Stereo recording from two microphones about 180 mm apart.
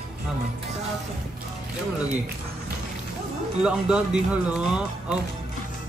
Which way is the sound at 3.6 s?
5° right (ahead or behind).